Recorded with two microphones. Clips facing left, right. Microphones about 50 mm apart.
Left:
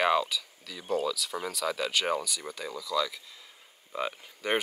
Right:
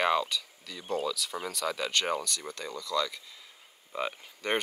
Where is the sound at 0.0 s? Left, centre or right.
Centre.